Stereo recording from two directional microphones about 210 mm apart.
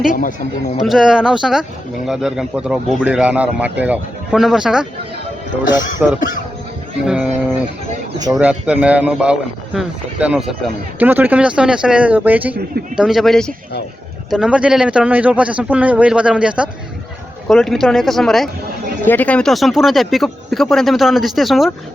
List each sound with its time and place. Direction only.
0.1 s speech: 40° left (ahead or behind)
0.8 s speech: centre (ahead or behind)
6.1 s speech: 40° left (ahead or behind)
7.0 s speech: 5° right (ahead or behind)
8.4 s speech: 5° right (ahead or behind)